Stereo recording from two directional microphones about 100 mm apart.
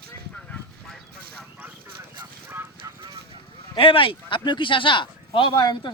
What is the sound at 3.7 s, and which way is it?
Speech, 60° left (ahead or behind).